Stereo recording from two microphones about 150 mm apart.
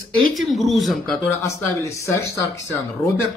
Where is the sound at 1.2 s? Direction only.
20° left (ahead or behind).